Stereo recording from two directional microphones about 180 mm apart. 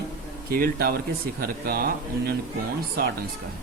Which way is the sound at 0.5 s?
55° right (ahead or behind).